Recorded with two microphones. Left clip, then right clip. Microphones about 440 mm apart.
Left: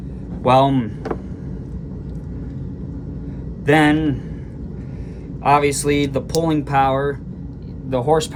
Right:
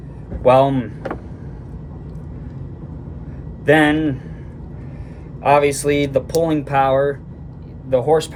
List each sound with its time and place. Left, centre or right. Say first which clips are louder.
0.4 s speech: right 2 dB; centre
3.7 s speech: right 1 dB; centre
5.4 s speech: right 1 dB; centre